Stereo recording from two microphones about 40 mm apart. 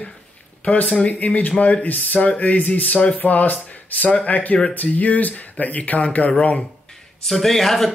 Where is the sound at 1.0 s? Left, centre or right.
Left.